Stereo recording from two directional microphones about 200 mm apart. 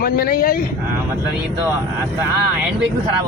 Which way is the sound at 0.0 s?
50° left (ahead or behind).